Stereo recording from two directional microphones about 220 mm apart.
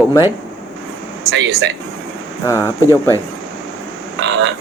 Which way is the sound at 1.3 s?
55° right (ahead or behind).